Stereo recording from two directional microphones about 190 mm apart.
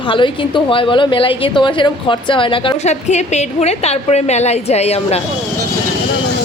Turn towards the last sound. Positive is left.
turn(degrees=35)  # may be behind; listen again after turning